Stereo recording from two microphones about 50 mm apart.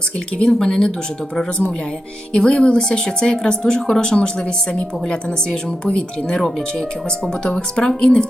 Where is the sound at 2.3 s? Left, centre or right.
Centre.